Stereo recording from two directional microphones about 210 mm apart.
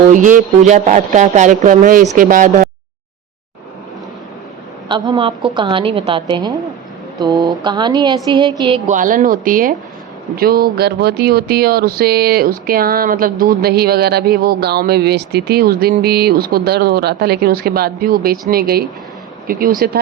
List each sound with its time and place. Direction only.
0.1 s speech: 40° right (ahead or behind)
4.9 s speech: 20° right (ahead or behind)
9.0 s speech: 40° right (ahead or behind)